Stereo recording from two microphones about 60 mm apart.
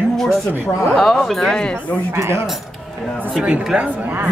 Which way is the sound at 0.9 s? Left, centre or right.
Centre.